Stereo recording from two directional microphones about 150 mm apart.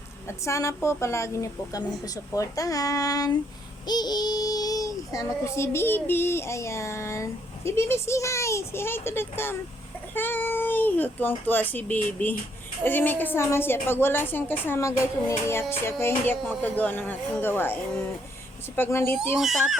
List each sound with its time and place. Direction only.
0.3 s a child's voice: 20° left (ahead or behind)
18.8 s a woman's voice: 15° left (ahead or behind)